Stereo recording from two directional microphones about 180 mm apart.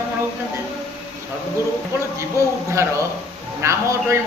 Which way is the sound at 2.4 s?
15° right (ahead or behind).